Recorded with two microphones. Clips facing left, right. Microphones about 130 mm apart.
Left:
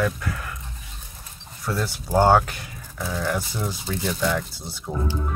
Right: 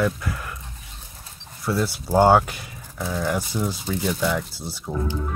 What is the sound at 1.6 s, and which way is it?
Speech, 10° right (ahead or behind).